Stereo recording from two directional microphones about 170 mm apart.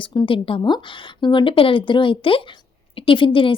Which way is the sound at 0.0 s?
30° left (ahead or behind).